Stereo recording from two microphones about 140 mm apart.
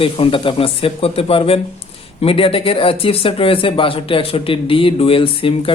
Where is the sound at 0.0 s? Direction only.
40° left (ahead or behind).